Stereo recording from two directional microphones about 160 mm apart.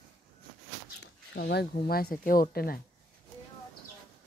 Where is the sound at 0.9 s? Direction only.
90° left; by 2.8 s 65° left (ahead or behind).